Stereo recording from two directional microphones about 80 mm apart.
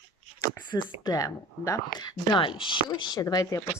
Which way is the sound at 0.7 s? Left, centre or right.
Left.